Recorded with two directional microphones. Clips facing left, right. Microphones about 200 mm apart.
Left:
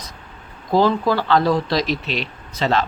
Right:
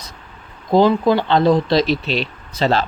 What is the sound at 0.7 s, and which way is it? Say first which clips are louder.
Speech: right 3 dB; 20° right (ahead or behind).